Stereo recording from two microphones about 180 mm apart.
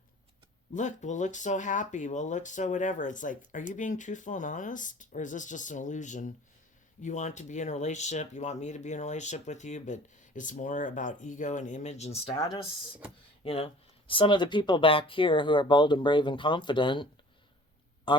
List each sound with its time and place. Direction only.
0.7 s speech: 45° left (ahead or behind)
13.4 s speech: 30° left (ahead or behind)
18.1 s speech: 25° left (ahead or behind)